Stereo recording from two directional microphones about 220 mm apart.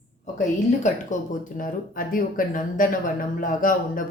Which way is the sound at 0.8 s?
35° left (ahead or behind).